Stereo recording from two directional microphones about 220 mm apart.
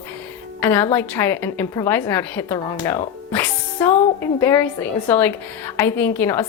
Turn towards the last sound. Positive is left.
turn(degrees=10)  # may be behind; listen again after turning